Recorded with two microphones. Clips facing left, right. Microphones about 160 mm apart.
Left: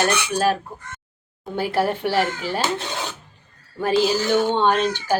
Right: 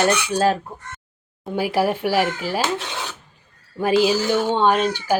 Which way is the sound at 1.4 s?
10° right (ahead or behind).